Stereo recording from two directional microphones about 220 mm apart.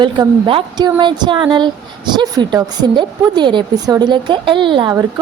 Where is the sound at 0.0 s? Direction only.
20° right (ahead or behind).